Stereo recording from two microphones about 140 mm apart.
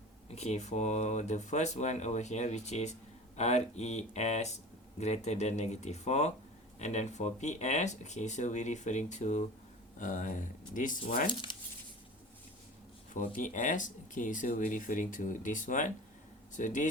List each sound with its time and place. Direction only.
0.3 s speech: 50° left (ahead or behind); by 10.9 s 70° left (ahead or behind)
11.3 s speech: 35° left (ahead or behind)
13.3 s speech: 65° left (ahead or behind)